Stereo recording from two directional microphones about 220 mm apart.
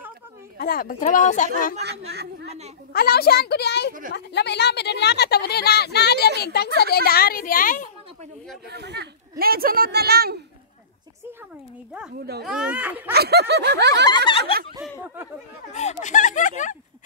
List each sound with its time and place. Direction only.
0.6 s speech: 40° left (ahead or behind)
1.8 s a woman's voice: 50° right (ahead or behind)
2.4 s a woman's voice: 30° right (ahead or behind)
2.9 s speech: 45° left (ahead or behind)
8.6 s a woman's voice: 50° right (ahead or behind)
12.4 s speech: 5° right (ahead or behind)
13.1 s a woman's voice: 45° right (ahead or behind)
14.0 s snicker: 20° left (ahead or behind)
14.4 s a woman's voice: 45° right (ahead or behind)
14.8 s speech: 10° right (ahead or behind)
15.7 s speech: 30° left (ahead or behind)